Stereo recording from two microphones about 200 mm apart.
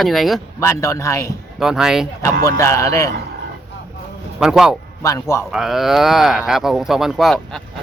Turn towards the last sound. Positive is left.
turn(degrees=0)  # may be behind; listen again after turning